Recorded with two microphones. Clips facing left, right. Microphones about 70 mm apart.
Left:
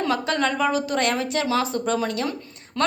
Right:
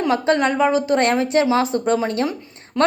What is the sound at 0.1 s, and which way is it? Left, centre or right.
A woman's voice, right.